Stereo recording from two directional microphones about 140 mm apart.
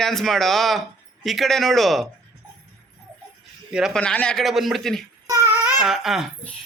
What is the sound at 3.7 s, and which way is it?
Speech, 5° right (ahead or behind).